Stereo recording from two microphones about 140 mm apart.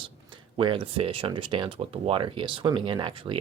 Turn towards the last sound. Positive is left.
turn(degrees=-35)  # may be behind; listen again after turning